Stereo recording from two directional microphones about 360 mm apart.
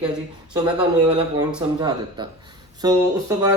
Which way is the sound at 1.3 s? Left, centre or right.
Centre.